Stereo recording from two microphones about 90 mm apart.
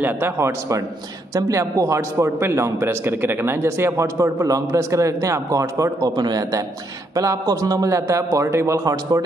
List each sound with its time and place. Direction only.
0.0 s a man's voice: 30° right (ahead or behind)